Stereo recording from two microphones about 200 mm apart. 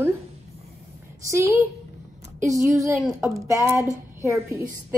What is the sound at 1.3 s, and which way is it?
A woman's voice, 15° right (ahead or behind).